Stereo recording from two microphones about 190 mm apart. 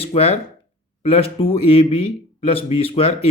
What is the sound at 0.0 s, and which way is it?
A man's voice, 30° left (ahead or behind).